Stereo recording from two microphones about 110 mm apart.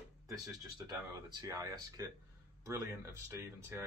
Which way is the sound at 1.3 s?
35° right (ahead or behind).